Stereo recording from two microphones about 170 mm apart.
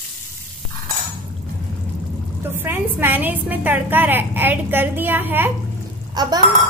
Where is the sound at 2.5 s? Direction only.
10° right (ahead or behind).